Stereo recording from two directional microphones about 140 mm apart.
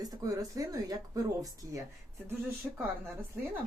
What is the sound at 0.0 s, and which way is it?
Speech, 25° right (ahead or behind).